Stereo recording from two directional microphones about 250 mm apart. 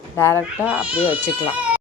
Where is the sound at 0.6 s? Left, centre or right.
Centre.